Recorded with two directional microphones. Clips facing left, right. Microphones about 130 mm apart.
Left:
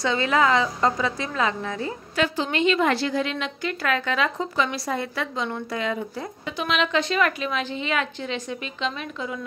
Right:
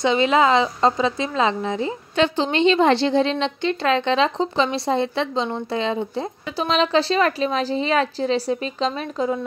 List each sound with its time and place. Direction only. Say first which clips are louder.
0.0 s a woman's voice: right 4 dB; 20° right (ahead or behind); by 9.4 s 35° right (ahead or behind)